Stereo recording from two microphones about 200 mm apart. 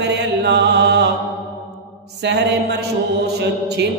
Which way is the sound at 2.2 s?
60° right (ahead or behind).